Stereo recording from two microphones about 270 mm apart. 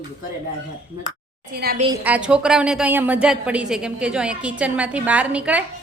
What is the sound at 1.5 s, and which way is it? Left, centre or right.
Speech, right.